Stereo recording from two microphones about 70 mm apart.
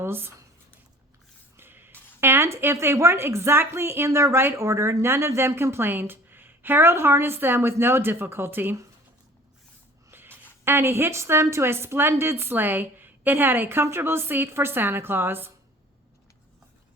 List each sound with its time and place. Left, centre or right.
0.0 s speech: right
1.5 s speech: right
10.1 s music: right
10.7 s speech: right